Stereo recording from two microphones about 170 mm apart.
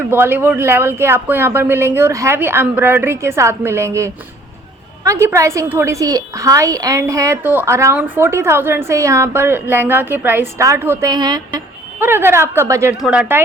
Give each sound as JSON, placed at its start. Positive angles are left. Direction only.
{"t": 0.0, "sound": "a woman's voice", "side_deg": -10}
{"t": 11.9, "sound": "a woman's voice", "side_deg": -10}
{"t": 13.0, "sound": "a woman's voice", "side_deg": -5}